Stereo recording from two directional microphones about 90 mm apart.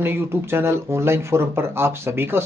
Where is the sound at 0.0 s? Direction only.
25° right (ahead or behind).